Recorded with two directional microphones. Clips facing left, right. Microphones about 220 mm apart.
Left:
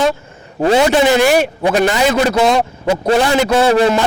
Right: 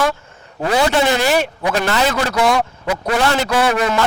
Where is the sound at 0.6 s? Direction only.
25° left (ahead or behind).